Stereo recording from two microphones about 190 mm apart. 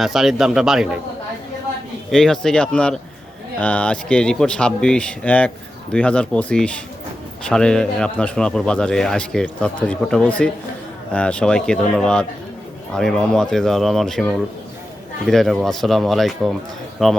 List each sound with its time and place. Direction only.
0.0 s speech: centre (ahead or behind)
2.0 s speech: centre (ahead or behind)